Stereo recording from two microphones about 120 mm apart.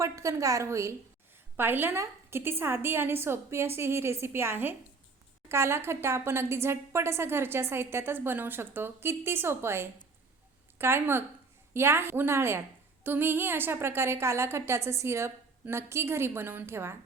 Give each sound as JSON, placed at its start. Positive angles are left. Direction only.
{"t": 0.0, "sound": "a woman's voice", "side_deg": -25}